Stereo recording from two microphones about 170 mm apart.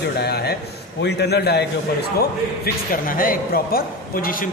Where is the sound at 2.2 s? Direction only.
60° left (ahead or behind).